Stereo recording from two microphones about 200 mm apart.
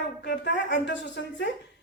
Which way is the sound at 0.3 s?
60° left (ahead or behind).